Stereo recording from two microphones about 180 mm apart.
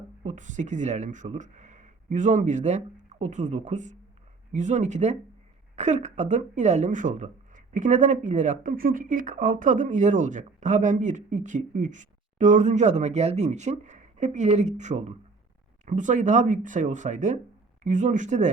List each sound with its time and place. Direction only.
0.2 s speech: 45° right (ahead or behind)